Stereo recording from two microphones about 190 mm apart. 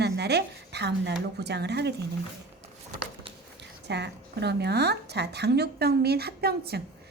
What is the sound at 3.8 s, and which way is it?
A woman's voice, 60° right (ahead or behind).